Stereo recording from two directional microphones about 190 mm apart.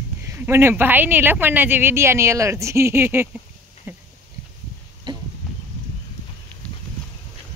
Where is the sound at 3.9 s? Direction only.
10° right (ahead or behind).